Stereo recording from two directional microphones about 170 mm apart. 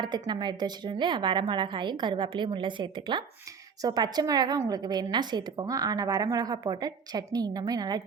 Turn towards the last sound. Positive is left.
turn(degrees=-25)  # may be behind; listen again after turning